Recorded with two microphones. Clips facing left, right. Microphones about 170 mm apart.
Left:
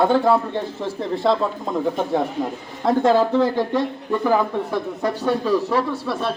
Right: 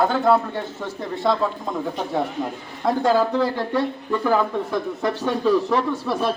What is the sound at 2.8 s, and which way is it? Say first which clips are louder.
Speech: left 2 dB; 25° left (ahead or behind).